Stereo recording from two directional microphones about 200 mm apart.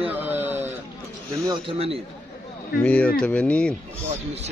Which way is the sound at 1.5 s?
30° right (ahead or behind).